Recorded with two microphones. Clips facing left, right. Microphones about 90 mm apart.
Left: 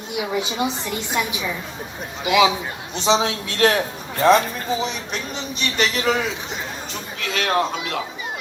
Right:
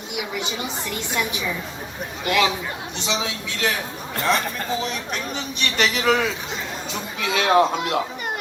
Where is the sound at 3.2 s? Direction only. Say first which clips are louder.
Left 6 dB; 55° left (ahead or behind).